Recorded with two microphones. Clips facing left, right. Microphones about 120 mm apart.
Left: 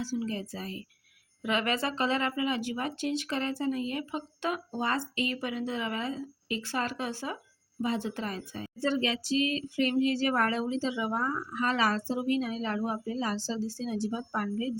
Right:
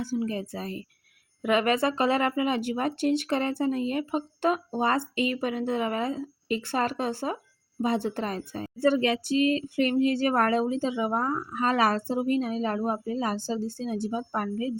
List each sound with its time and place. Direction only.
0.0 s a woman's voice: 55° right (ahead or behind)